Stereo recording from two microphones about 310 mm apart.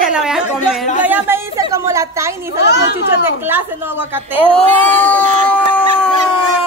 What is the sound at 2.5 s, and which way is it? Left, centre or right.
Speech, left.